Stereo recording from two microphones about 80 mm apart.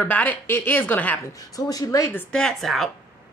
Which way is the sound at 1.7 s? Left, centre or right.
Left.